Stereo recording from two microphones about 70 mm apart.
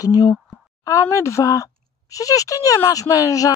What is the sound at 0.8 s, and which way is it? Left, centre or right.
Speech, left.